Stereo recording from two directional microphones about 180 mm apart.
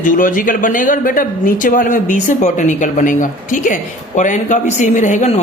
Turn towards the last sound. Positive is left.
turn(degrees=40)  # may be behind; listen again after turning